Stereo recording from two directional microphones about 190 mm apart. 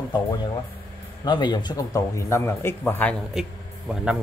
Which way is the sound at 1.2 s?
25° left (ahead or behind).